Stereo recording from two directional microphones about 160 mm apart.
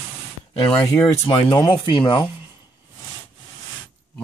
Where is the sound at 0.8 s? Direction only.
15° left (ahead or behind); by 2.2 s 30° left (ahead or behind).